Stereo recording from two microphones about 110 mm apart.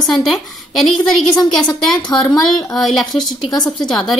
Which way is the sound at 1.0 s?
40° left (ahead or behind).